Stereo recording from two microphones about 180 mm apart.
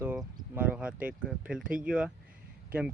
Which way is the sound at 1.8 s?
5° right (ahead or behind).